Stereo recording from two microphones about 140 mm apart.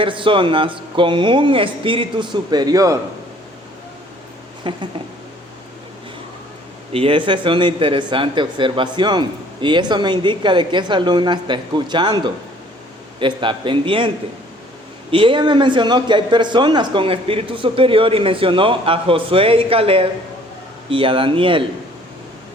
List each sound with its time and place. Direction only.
0.0 s speech: 35° right (ahead or behind)
4.7 s speech: 35° right (ahead or behind)
6.9 s speech: 40° right (ahead or behind)
15.1 s speech: 40° right (ahead or behind)